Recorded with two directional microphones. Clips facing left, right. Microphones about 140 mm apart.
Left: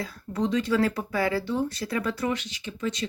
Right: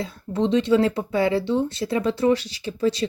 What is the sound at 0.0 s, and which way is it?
Speech, 25° right (ahead or behind).